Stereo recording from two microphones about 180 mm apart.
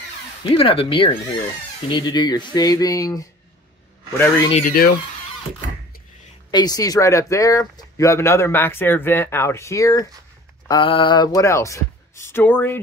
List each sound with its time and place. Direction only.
0.4 s speech: 30° left (ahead or behind)
4.6 s speech: 60° left (ahead or behind)
6.5 s speech: 20° left (ahead or behind)